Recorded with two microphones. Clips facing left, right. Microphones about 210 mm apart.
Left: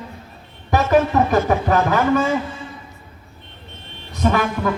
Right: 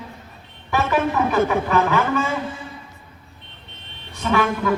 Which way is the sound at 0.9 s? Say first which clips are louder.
Left 5 dB; 40° left (ahead or behind).